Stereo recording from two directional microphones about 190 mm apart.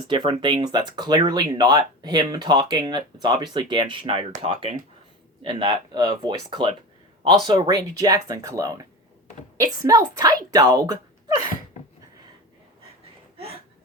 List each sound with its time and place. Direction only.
0.1 s speech: 25° right (ahead or behind)